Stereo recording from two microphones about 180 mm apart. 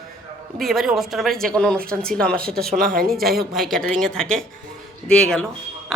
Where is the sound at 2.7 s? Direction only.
50° right (ahead or behind).